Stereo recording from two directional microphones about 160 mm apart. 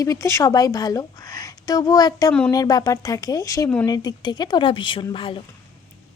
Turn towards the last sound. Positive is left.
turn(degrees=35)  # may be behind; listen again after turning